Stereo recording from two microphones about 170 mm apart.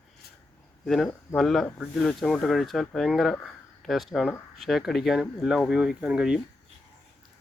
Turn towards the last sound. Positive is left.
turn(degrees=-5)  # may be behind; listen again after turning